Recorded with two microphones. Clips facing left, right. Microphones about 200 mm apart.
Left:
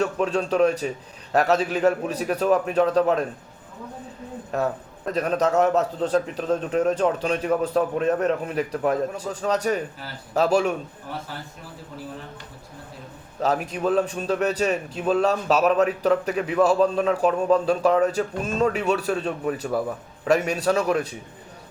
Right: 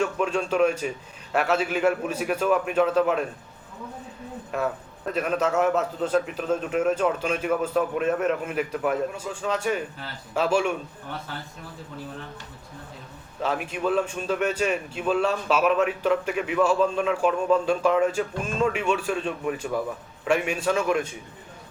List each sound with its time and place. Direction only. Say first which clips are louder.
0.0 s a man's voice: left 2 dB; 35° left (ahead or behind)
4.5 s a man's voice: left 2 dB; 35° left (ahead or behind)
13.4 s a man's voice: left 3 dB; 40° left (ahead or behind)